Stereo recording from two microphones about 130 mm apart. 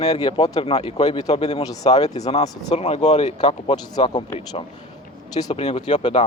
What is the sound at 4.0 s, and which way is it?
Speech, 45° left (ahead or behind).